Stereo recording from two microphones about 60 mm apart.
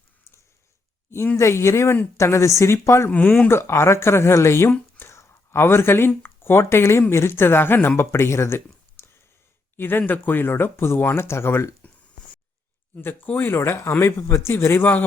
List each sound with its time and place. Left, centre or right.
1.4 s speech: left
3.1 s speech: left
3.5 s speech: left
9.7 s speech: left
13.2 s speech: left
13.6 s speech: left